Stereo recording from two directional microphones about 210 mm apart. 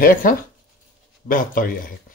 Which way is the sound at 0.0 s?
40° left (ahead or behind).